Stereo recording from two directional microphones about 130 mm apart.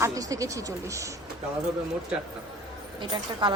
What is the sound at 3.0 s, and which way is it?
Speech, 35° right (ahead or behind).